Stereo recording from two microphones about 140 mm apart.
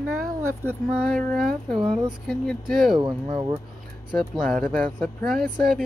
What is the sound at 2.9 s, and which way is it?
Speech, 35° right (ahead or behind).